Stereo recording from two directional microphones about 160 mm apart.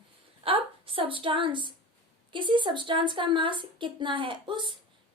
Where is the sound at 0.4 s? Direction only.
35° right (ahead or behind).